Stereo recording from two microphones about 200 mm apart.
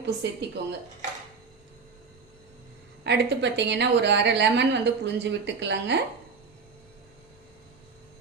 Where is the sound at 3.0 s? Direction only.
60° right (ahead or behind).